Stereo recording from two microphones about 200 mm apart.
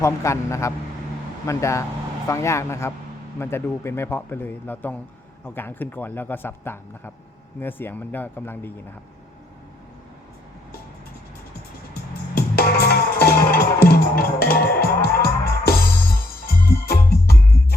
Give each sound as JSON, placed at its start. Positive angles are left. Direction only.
{"t": 0.0, "sound": "speech", "side_deg": 15}
{"t": 12.3, "sound": "music", "side_deg": 50}